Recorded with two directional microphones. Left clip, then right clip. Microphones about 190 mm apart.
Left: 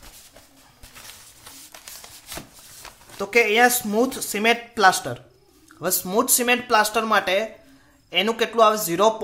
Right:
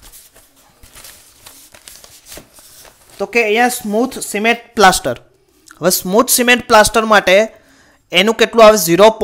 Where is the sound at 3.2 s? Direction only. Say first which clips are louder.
Right 4 dB; 30° right (ahead or behind).